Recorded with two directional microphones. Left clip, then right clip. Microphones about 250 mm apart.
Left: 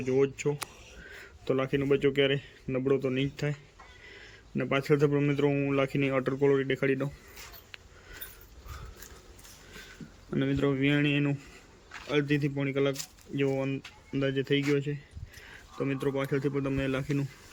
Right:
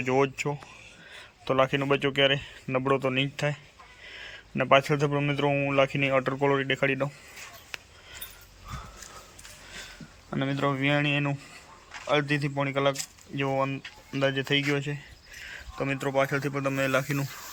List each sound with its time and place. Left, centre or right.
0.0 s speech: centre
1.1 s a sound: centre
1.5 s a man's voice: centre
10.3 s a man's voice: centre